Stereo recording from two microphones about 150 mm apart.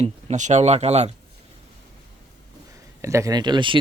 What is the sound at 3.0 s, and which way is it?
Speech, 20° right (ahead or behind).